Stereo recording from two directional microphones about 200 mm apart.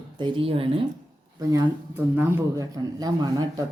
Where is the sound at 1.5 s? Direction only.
15° right (ahead or behind).